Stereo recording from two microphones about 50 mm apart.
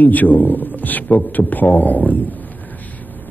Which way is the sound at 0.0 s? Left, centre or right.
Left.